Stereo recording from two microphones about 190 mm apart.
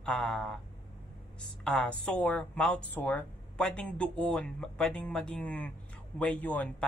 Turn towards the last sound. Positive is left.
turn(degrees=10)  # may be behind; listen again after turning